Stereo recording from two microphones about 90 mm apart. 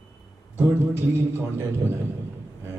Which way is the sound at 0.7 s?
25° right (ahead or behind).